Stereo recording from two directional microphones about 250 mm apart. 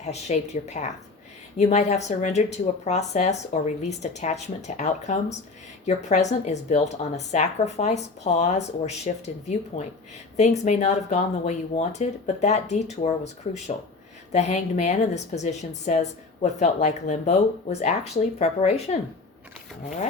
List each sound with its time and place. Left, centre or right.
0.0 s a woman's voice: left